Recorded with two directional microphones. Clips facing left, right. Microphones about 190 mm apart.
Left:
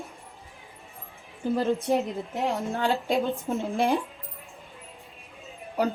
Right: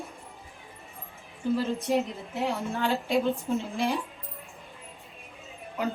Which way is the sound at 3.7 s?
55° left (ahead or behind).